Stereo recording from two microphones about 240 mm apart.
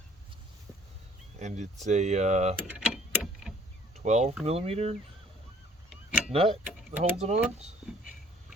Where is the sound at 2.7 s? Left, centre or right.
Centre.